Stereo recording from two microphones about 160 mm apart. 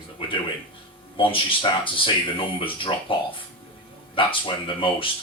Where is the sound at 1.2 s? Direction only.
35° left (ahead or behind).